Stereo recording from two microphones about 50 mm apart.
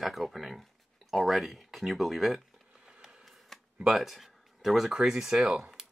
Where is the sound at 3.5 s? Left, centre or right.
Centre.